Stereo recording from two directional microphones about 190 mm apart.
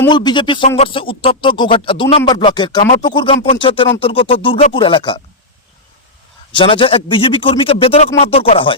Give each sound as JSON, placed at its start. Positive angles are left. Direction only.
{"t": 0.1, "sound": "speech", "side_deg": 25}
{"t": 6.5, "sound": "speech", "side_deg": 25}